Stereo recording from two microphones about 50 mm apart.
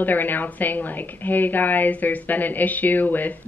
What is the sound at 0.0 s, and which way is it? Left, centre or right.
Speech, left.